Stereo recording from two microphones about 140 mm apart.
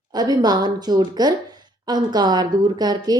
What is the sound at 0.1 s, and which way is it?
A woman's voice, 30° right (ahead or behind).